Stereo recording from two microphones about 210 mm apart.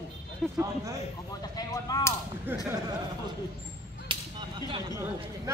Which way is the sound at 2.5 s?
10° right (ahead or behind).